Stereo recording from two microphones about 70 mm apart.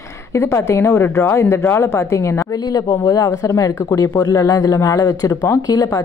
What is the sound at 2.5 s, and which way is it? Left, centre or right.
Speech, left.